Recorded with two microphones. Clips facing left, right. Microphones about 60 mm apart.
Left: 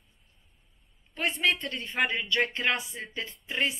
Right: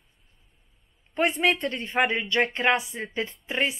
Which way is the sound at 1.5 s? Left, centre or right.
Right.